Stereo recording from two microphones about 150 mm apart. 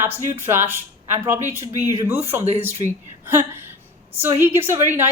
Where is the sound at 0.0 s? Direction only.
15° right (ahead or behind).